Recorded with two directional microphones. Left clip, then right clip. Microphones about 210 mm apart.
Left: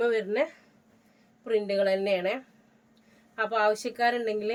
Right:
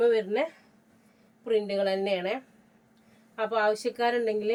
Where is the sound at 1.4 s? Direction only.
15° left (ahead or behind).